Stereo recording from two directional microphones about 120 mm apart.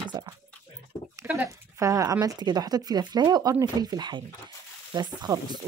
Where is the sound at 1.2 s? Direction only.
10° right (ahead or behind).